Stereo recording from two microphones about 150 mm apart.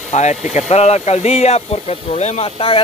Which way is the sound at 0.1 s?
50° left (ahead or behind).